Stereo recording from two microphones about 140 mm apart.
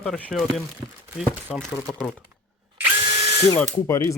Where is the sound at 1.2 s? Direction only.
5° left (ahead or behind).